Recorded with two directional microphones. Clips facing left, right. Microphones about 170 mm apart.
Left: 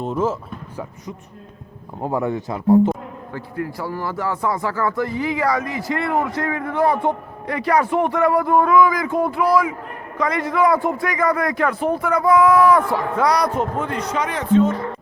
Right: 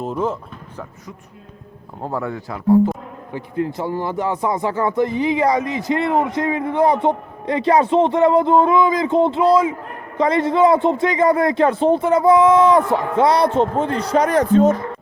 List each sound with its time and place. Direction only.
0.0 s speech: centre (ahead or behind)
2.0 s speech: 15° left (ahead or behind)
3.3 s a man's voice: 20° right (ahead or behind); by 14.8 s 40° right (ahead or behind)